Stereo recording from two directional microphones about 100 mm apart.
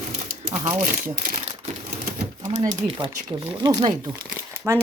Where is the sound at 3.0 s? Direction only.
55° right (ahead or behind).